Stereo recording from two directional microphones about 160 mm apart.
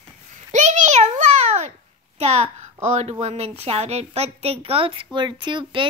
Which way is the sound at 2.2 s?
40° right (ahead or behind).